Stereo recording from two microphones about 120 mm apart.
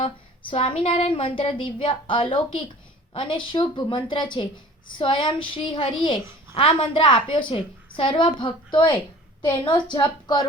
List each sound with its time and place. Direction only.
0.5 s a woman's voice: 50° left (ahead or behind)